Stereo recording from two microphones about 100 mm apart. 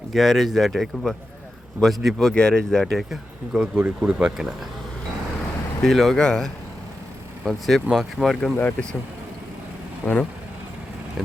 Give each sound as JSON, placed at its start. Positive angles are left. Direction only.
{"t": 0.1, "sound": "speech", "side_deg": 0}
{"t": 5.8, "sound": "speech", "side_deg": 0}
{"t": 7.9, "sound": "speech", "side_deg": 0}
{"t": 8.5, "sound": "speech", "side_deg": 20}
{"t": 10.0, "sound": "speech", "side_deg": 15}